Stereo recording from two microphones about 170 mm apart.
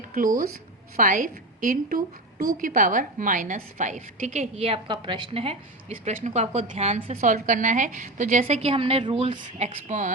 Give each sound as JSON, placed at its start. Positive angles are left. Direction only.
{"t": 0.1, "sound": "a woman's voice", "side_deg": -55}